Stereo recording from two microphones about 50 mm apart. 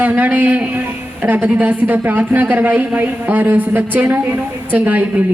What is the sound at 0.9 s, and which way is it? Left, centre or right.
A woman's voice, right.